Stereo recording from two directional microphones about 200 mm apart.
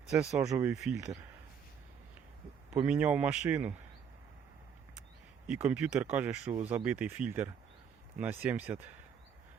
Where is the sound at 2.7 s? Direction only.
5° right (ahead or behind).